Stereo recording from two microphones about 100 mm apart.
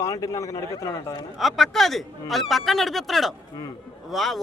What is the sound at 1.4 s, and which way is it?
Speech, centre (ahead or behind).